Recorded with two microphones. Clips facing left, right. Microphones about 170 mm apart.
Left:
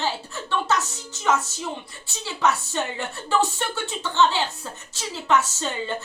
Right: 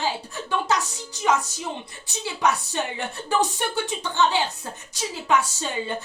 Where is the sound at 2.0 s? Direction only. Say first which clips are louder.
Even; 15° right (ahead or behind).